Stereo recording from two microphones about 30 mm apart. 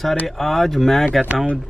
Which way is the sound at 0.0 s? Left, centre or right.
Centre.